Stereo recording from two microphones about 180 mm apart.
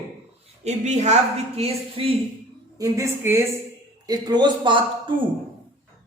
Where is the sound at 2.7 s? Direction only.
15° right (ahead or behind).